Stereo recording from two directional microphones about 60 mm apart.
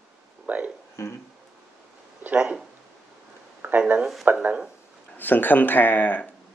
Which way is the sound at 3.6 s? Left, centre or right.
Right.